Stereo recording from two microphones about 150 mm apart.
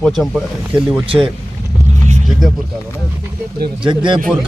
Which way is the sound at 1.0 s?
35° right (ahead or behind).